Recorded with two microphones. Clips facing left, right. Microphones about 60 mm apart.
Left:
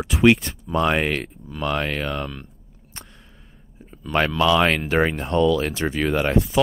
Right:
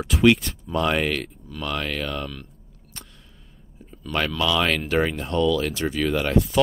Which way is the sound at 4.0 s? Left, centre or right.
Left.